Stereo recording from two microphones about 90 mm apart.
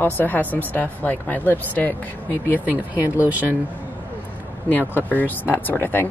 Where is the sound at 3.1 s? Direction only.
20° right (ahead or behind).